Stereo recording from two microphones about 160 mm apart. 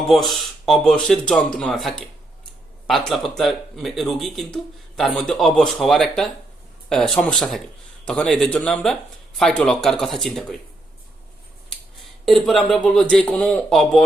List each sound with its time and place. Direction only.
0.1 s speech: centre (ahead or behind)
12.2 s speech: centre (ahead or behind)